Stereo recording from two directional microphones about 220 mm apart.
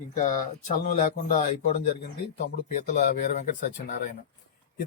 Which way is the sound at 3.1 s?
35° left (ahead or behind).